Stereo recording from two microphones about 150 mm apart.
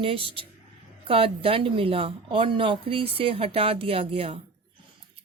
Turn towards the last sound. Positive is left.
turn(degrees=-40)  # may be behind; listen again after turning